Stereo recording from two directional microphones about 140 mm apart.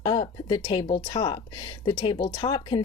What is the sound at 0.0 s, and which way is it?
Speech, 30° left (ahead or behind).